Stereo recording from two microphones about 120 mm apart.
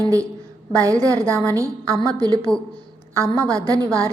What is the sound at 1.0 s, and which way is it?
A woman's voice, 25° right (ahead or behind).